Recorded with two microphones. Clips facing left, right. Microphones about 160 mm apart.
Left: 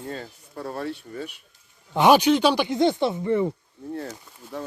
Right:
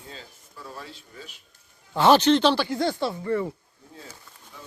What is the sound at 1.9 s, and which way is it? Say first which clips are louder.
Speech: left 1 dB; 15° left (ahead or behind).